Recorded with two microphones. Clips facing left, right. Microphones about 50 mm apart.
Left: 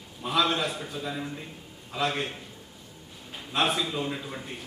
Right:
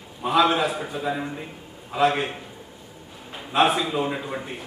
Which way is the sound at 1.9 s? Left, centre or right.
Centre.